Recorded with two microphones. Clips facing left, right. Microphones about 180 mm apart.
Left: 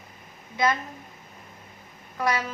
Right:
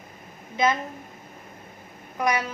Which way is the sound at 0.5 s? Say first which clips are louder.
Right 2 dB; 20° right (ahead or behind).